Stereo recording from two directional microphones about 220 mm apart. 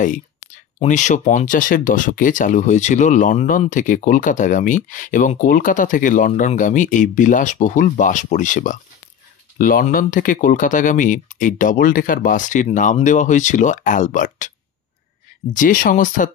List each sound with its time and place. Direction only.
0.0 s speech: 35° left (ahead or behind)
15.5 s speech: 40° left (ahead or behind)